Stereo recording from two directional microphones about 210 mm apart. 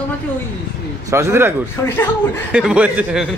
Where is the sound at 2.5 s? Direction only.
5° right (ahead or behind).